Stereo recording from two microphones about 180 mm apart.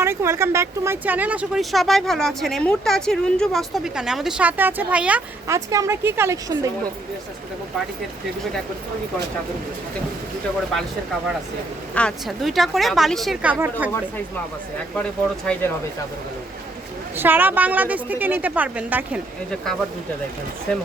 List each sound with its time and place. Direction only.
0.0 s speech: 15° right (ahead or behind)
5.5 s a woman's voice: 20° right (ahead or behind)
11.9 s speech: 5° left (ahead or behind)
15.5 s speech: 5° left (ahead or behind)
17.2 s a woman's voice: 10° right (ahead or behind)